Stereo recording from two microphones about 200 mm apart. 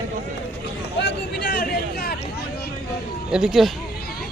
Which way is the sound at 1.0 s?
55° left (ahead or behind).